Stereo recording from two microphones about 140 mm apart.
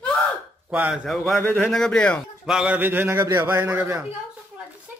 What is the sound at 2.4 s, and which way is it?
A man's voice, 5° right (ahead or behind).